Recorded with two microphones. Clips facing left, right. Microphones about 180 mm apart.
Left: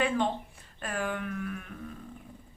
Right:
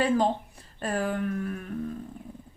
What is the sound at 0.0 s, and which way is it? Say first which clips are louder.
Speech: right 4 dB; 35° right (ahead or behind).